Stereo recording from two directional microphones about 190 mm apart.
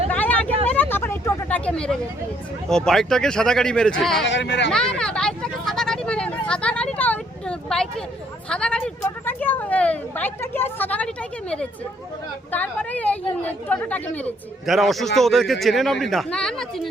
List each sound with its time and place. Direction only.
0.1 s vehicle: 10° left (ahead or behind)
2.6 s speech: 5° left (ahead or behind)
4.3 s speech: 70° left (ahead or behind)
4.7 s speech: 5° left (ahead or behind)